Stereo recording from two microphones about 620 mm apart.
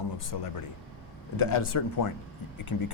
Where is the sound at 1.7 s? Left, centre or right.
Left.